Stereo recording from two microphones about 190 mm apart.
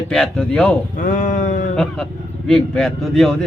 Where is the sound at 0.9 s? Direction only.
45° left (ahead or behind).